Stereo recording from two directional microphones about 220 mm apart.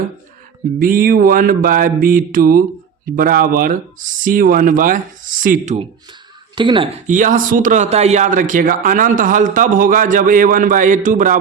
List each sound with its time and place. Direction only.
0.8 s speech: 40° right (ahead or behind)
6.6 s speech: 20° right (ahead or behind)
7.1 s speech: 35° right (ahead or behind)